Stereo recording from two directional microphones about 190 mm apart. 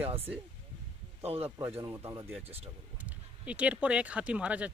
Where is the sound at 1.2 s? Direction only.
30° right (ahead or behind).